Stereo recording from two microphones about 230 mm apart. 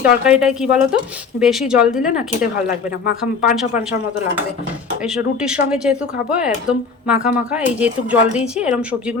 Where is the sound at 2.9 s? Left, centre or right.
Left.